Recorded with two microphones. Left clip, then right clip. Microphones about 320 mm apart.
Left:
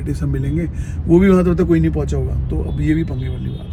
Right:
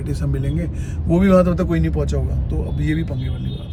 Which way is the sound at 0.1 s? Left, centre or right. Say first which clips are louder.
Left 4 dB; centre.